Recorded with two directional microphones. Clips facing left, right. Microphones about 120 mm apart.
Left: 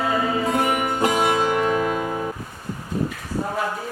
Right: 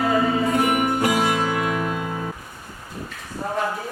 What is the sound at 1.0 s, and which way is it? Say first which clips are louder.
Music: left 1 dB; 25° left (ahead or behind).